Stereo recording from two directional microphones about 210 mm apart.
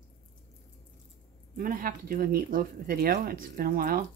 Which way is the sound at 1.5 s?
40° right (ahead or behind).